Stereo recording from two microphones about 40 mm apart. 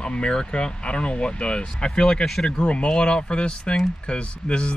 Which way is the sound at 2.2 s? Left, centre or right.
Centre.